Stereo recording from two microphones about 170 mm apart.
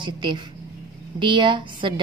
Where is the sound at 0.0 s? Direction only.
25° right (ahead or behind).